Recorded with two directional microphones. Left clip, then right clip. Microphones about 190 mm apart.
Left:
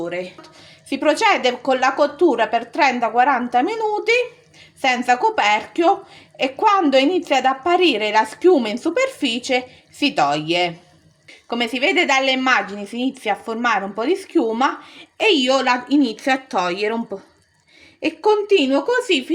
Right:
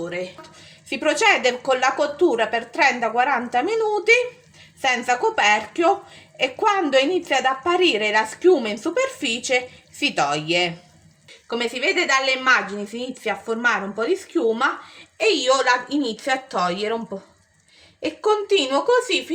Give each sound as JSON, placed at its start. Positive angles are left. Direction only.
{"t": 0.0, "sound": "a woman's voice", "side_deg": 30}
{"t": 0.9, "sound": "a woman's voice", "side_deg": 15}
{"t": 11.4, "sound": "a woman's voice", "side_deg": 30}
{"t": 18.0, "sound": "a woman's voice", "side_deg": 35}